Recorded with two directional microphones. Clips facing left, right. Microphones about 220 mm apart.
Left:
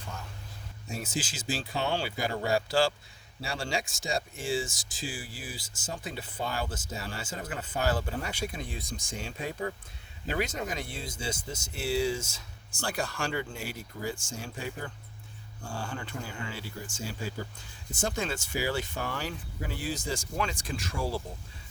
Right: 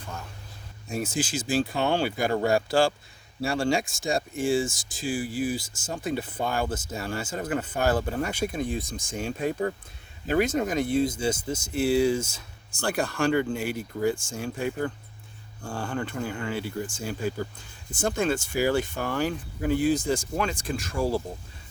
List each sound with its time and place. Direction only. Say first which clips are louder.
0.9 s speech: right 6 dB; 50° right (ahead or behind)